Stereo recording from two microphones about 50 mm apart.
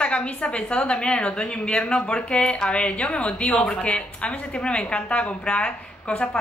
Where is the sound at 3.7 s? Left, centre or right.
Left.